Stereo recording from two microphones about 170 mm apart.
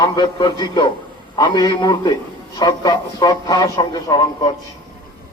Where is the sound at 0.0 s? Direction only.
25° left (ahead or behind).